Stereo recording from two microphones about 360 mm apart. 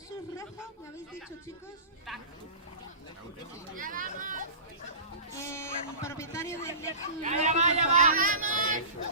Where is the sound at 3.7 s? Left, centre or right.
Right.